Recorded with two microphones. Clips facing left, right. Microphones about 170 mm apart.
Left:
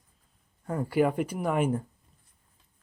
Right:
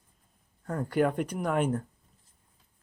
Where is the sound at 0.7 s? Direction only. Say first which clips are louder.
Left 1 dB; 5° left (ahead or behind).